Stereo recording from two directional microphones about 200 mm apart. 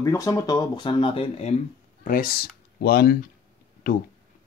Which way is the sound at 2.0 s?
45° left (ahead or behind).